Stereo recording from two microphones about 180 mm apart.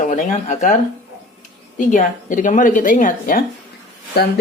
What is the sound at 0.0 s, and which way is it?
Speech, 45° left (ahead or behind).